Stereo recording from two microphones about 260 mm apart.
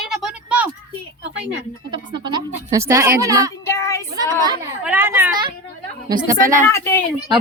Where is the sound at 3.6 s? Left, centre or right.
Centre.